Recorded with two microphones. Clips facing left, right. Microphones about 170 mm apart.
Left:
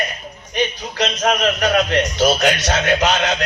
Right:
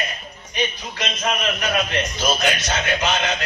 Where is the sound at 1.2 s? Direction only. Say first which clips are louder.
Left 6 dB; 75° left (ahead or behind).